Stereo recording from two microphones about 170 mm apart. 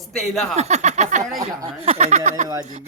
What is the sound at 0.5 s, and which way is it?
Speech, 40° right (ahead or behind).